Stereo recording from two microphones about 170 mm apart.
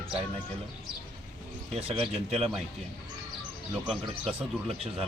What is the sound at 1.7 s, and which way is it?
Speech, 35° right (ahead or behind).